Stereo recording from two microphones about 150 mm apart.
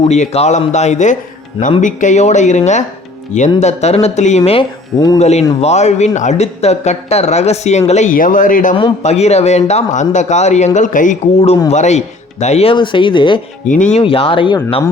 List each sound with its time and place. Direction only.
0.1 s speech: 50° left (ahead or behind)
4.9 s speech: 25° left (ahead or behind)
5.2 s speech: 45° left (ahead or behind); by 8.7 s 60° left (ahead or behind)
8.7 s a man's voice: 40° left (ahead or behind)
12.7 s speech: 30° left (ahead or behind)
13.7 s a man's voice: 55° left (ahead or behind)
14.0 s speech: 35° left (ahead or behind)